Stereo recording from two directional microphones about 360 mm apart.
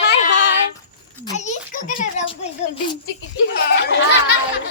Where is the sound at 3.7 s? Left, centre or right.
Left.